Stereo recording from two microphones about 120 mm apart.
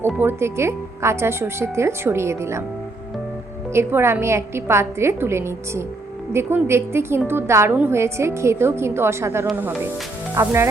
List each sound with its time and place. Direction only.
0.2 s speech: 20° right (ahead or behind)
3.7 s speech: 20° right (ahead or behind)